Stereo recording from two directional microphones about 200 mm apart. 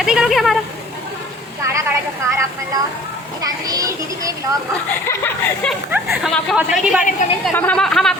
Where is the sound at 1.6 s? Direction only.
15° right (ahead or behind).